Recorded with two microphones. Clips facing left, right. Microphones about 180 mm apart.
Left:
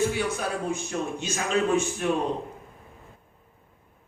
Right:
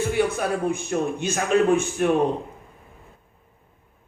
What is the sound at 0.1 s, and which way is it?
A man's voice, 55° right (ahead or behind).